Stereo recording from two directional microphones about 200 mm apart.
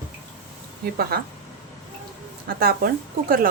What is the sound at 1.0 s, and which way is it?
Speech, 50° right (ahead or behind).